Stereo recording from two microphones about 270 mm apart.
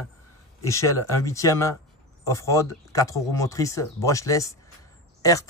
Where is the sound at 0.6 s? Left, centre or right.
Centre.